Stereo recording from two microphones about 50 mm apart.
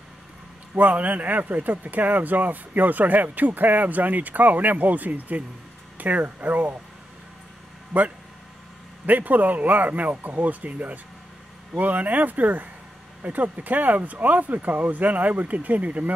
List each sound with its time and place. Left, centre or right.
0.7 s speech: right
7.9 s speech: centre
9.0 s speech: right